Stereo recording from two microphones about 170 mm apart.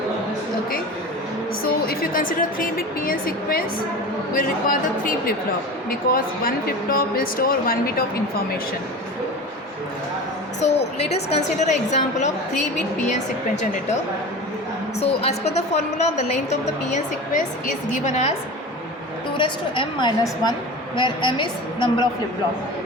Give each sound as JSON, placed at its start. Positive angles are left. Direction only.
{"t": 1.6, "sound": "speech", "side_deg": 60}
{"t": 10.6, "sound": "a woman's voice", "side_deg": 40}
{"t": 15.0, "sound": "a woman's voice", "side_deg": 40}
{"t": 19.4, "sound": "a woman's voice", "side_deg": 30}